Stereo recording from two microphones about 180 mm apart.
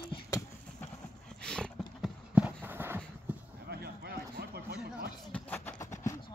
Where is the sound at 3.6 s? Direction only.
60° right (ahead or behind).